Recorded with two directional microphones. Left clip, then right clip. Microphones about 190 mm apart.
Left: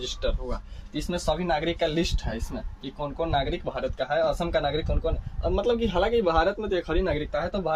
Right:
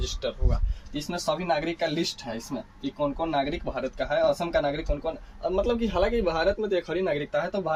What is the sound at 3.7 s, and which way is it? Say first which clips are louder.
Speech: left 1 dB; 30° left (ahead or behind).